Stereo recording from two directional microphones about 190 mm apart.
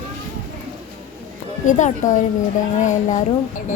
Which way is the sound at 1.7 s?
40° left (ahead or behind).